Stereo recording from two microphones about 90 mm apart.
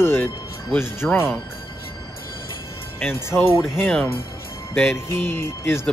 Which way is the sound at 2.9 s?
25° left (ahead or behind).